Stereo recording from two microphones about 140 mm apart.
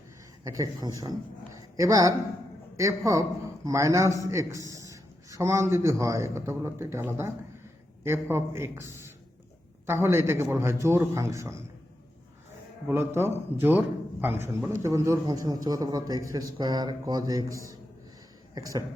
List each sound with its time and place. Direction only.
0.4 s a man's voice: 25° right (ahead or behind)
1.5 s a sound: 25° right (ahead or behind)
2.7 s a man's voice: 20° right (ahead or behind)
13.1 s a man's voice: 15° right (ahead or behind)